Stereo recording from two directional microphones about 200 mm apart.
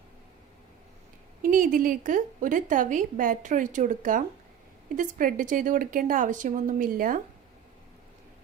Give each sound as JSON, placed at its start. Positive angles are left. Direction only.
{"t": 1.4, "sound": "a woman's voice", "side_deg": -45}